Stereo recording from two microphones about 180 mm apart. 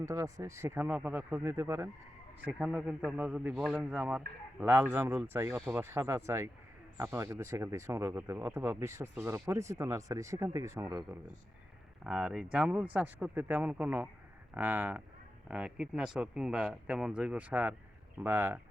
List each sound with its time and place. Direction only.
0.0 s speech: 15° right (ahead or behind)